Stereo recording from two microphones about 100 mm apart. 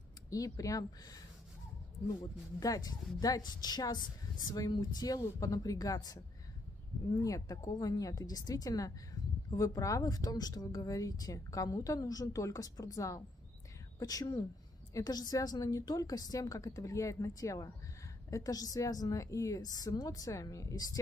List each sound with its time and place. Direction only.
0.3 s speech: 35° left (ahead or behind)
2.6 s speech: 40° left (ahead or behind)
7.2 s a woman's voice: 35° left (ahead or behind)